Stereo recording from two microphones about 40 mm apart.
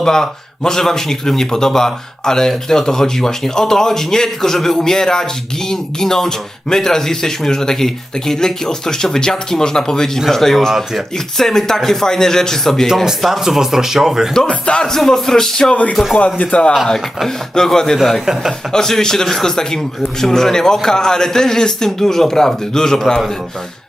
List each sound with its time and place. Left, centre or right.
0.0 s speech: centre
11.3 s speech: centre
13.4 s speech: centre
14.3 s speech: centre
16.1 s speech: left
17.2 s speech: centre
17.9 s speech: centre
18.7 s speech: centre